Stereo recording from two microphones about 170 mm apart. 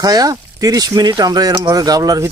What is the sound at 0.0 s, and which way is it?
Speech, 20° right (ahead or behind).